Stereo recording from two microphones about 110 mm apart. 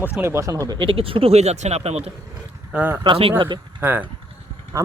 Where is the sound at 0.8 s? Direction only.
55° right (ahead or behind); by 2.1 s 70° right (ahead or behind).